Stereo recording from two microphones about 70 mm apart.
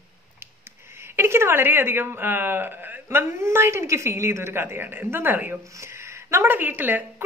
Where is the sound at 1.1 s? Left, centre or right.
Right.